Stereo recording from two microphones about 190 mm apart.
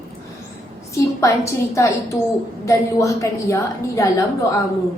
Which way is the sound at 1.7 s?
15° left (ahead or behind).